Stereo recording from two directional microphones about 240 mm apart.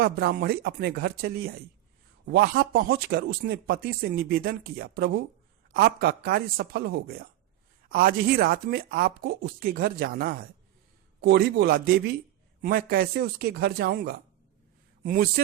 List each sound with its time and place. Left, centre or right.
0.0 s speech: right